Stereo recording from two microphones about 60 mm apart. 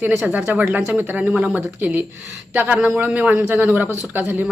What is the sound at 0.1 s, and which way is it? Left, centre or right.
Speech, right.